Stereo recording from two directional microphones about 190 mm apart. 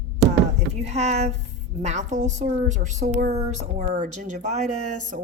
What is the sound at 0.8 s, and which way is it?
Speech, 35° right (ahead or behind).